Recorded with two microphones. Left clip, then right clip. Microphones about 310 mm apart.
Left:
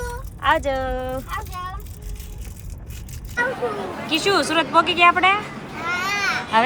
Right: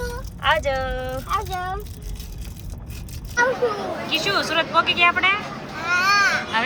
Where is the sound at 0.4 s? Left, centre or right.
Centre.